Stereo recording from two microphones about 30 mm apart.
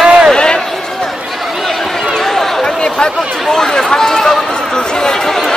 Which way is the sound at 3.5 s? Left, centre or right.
Left.